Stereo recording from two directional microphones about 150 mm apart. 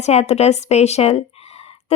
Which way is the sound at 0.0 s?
45° left (ahead or behind).